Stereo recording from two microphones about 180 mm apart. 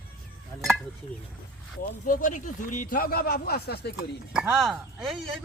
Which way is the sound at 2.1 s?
45° left (ahead or behind).